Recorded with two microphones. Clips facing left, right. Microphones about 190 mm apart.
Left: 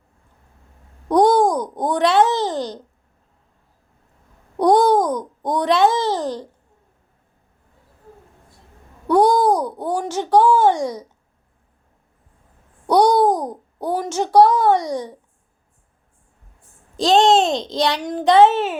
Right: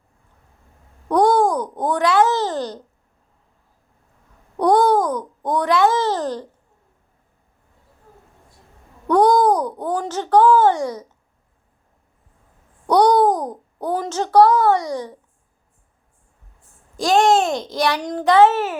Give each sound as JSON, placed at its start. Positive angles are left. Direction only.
{"t": 1.0, "sound": "a sound", "side_deg": 15}
{"t": 2.0, "sound": "a child's voice", "side_deg": 20}
{"t": 4.5, "sound": "a child's voice", "side_deg": 15}
{"t": 9.0, "sound": "a child's voice", "side_deg": 10}
{"t": 12.9, "sound": "a child's voice", "side_deg": 10}
{"t": 17.0, "sound": "a child's voice", "side_deg": 20}